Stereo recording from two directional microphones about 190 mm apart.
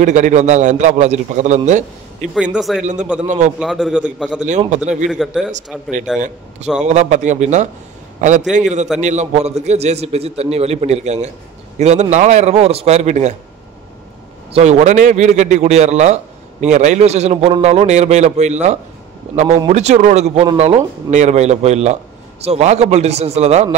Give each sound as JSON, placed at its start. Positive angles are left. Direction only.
{"t": 0.0, "sound": "a man's voice", "side_deg": -40}
{"t": 2.5, "sound": "a man's voice", "side_deg": 0}
{"t": 2.8, "sound": "a man's voice", "side_deg": -40}
{"t": 3.5, "sound": "a man's voice", "side_deg": 0}
{"t": 4.5, "sound": "a man's voice", "side_deg": -40}
{"t": 5.1, "sound": "a man's voice", "side_deg": -5}
{"t": 6.1, "sound": "a man's voice", "side_deg": -40}
{"t": 14.5, "sound": "a man's voice", "side_deg": -35}